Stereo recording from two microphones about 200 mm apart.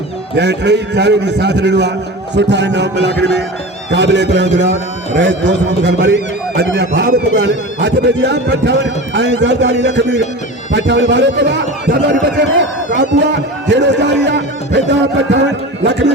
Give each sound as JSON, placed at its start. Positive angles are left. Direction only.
{"t": 0.3, "sound": "a man's voice", "side_deg": -60}